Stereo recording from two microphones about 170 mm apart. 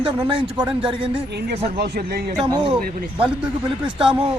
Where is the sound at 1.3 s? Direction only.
75° right (ahead or behind).